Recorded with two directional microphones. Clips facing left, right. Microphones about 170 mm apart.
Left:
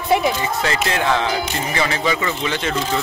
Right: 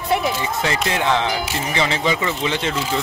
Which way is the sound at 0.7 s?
20° right (ahead or behind).